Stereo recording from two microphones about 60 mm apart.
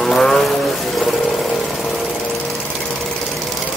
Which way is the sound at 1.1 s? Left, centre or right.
Centre.